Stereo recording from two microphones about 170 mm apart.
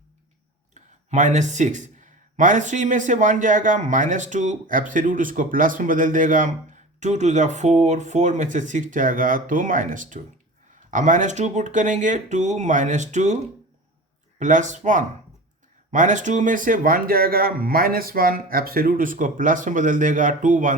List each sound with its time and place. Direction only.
0.7 s speech: 45° right (ahead or behind)